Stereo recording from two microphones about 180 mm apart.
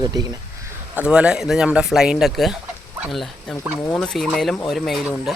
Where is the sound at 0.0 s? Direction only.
20° right (ahead or behind).